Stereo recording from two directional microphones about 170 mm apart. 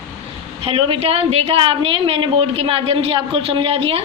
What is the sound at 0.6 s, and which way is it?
A woman's voice, 35° right (ahead or behind).